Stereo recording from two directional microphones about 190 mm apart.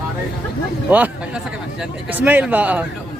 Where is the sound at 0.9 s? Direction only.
10° right (ahead or behind).